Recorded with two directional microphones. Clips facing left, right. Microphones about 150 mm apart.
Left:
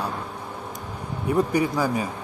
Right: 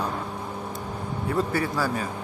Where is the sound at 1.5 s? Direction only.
15° left (ahead or behind).